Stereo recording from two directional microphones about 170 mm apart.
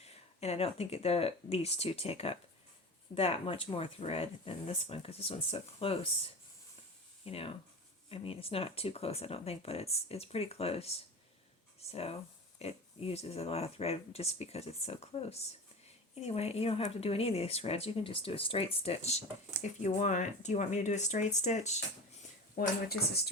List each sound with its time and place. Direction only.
0.0 s speech: 40° left (ahead or behind)
7.3 s speech: 35° left (ahead or behind)
22.6 s speech: 60° left (ahead or behind)